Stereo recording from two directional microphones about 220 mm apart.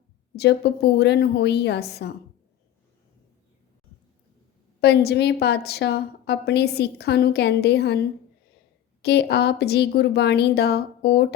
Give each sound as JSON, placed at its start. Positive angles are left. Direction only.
{"t": 0.3, "sound": "a woman's voice", "side_deg": 50}
{"t": 4.8, "sound": "a woman's voice", "side_deg": 50}
{"t": 9.0, "sound": "a woman's voice", "side_deg": 45}